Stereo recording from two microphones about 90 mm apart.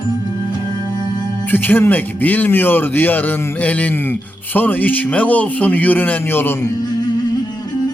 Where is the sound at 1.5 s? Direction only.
20° left (ahead or behind).